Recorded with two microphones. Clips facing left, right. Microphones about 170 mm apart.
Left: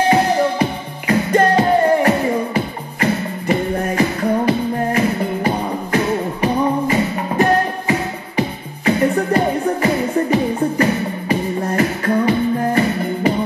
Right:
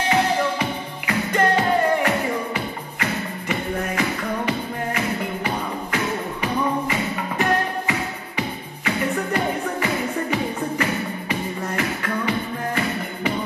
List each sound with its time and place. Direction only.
0.1 s music: 35° left (ahead or behind)